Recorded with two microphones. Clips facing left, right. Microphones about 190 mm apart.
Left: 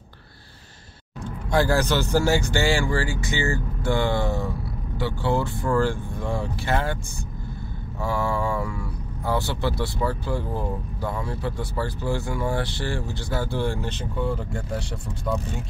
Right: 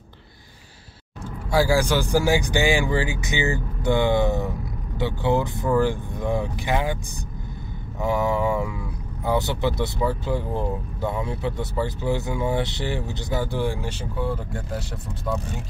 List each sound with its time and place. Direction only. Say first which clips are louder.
1.2 s speech: right 1 dB; 5° right (ahead or behind)
8.0 s speech: right 3 dB; 20° right (ahead or behind); by 15.6 s centre (ahead or behind)